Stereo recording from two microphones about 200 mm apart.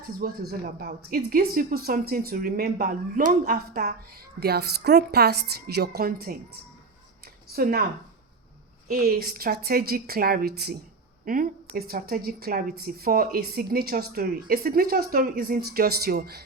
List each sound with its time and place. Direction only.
0.2 s speech: 45° right (ahead or behind)
7.4 s a sound: 50° right (ahead or behind)
8.9 s speech: 50° right (ahead or behind)